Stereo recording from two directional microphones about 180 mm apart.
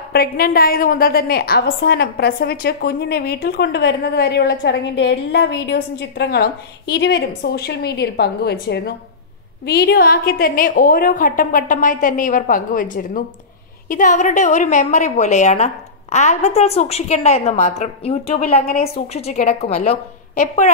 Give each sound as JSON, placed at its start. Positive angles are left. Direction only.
{"t": 0.1, "sound": "a woman's voice", "side_deg": 55}